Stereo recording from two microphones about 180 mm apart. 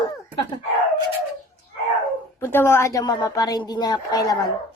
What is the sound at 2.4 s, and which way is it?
A woman's voice, 15° left (ahead or behind).